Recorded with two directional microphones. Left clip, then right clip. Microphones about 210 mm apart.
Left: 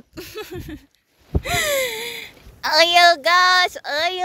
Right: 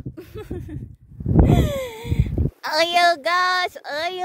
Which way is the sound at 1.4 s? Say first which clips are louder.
Left 5 dB; centre (ahead or behind).